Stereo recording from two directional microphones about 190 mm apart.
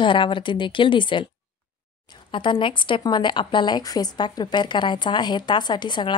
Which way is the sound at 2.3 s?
25° left (ahead or behind).